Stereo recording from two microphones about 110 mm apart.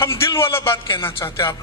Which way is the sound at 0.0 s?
25° left (ahead or behind).